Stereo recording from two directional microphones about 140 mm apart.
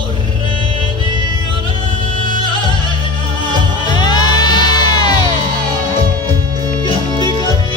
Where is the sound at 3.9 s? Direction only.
30° left (ahead or behind).